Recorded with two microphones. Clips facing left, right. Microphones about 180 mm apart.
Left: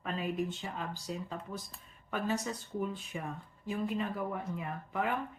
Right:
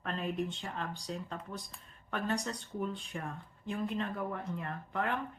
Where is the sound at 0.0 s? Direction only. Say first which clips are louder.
Left 1 dB; 5° left (ahead or behind).